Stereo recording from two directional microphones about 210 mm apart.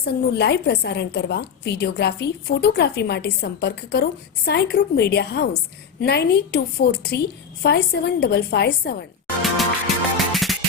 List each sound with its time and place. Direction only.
0.0 s a woman's voice: 50° left (ahead or behind)
10.2 s music: centre (ahead or behind)